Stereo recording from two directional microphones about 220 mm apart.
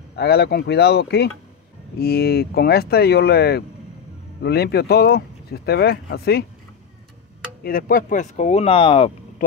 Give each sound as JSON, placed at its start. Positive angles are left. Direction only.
{"t": 0.1, "sound": "speech", "side_deg": 50}
{"t": 7.6, "sound": "speech", "side_deg": 40}